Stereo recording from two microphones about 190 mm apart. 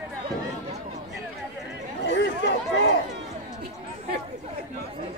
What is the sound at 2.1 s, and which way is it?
Chatter, 70° left (ahead or behind).